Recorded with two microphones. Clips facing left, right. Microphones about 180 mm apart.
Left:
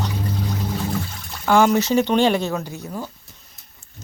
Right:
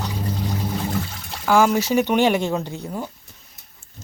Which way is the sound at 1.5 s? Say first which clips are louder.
Left 1 dB; 5° right (ahead or behind).